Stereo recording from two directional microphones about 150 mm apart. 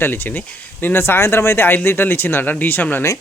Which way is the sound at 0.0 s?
15° left (ahead or behind).